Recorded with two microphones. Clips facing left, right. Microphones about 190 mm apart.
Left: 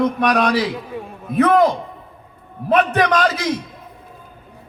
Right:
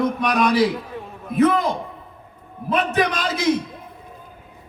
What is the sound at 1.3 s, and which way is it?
Speech, 60° left (ahead or behind).